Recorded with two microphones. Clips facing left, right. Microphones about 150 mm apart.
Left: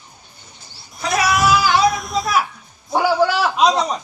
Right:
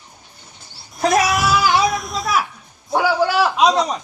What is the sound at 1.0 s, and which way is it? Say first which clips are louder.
Speech: right 4 dB; 45° right (ahead or behind).